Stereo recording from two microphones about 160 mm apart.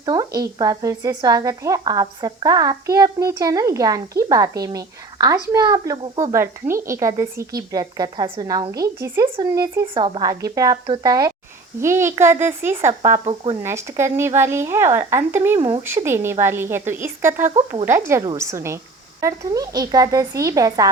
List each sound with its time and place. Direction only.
0.0 s a woman's voice: 25° right (ahead or behind)
13.1 s speech: 35° right (ahead or behind)
13.6 s speech: 15° right (ahead or behind)
15.5 s a woman's voice: 30° right (ahead or behind)
16.0 s a woman's voice: 15° right (ahead or behind)